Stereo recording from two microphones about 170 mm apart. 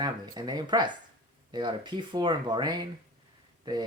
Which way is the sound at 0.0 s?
25° right (ahead or behind).